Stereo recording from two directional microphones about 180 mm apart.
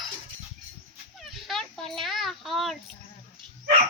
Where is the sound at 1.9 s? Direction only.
Centre (ahead or behind).